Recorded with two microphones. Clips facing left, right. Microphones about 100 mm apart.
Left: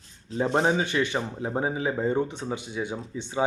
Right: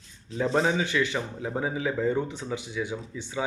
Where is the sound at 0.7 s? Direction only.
40° left (ahead or behind).